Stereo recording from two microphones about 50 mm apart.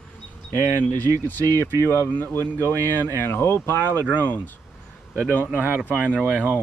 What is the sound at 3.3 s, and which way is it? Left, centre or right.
Speech, left.